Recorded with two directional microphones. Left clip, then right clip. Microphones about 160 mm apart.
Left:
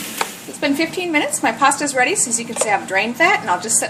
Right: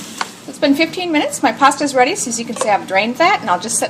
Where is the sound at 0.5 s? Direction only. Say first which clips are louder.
Right 4 dB; 40° right (ahead or behind).